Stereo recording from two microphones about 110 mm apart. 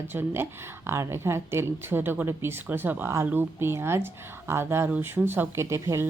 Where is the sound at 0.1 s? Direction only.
20° right (ahead or behind).